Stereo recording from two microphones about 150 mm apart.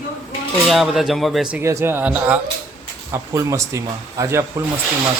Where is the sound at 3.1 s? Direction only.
20° right (ahead or behind).